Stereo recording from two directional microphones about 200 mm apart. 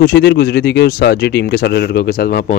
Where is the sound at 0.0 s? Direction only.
55° left (ahead or behind).